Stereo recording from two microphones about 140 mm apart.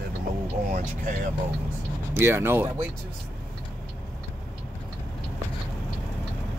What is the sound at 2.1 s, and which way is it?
Speech, 15° right (ahead or behind).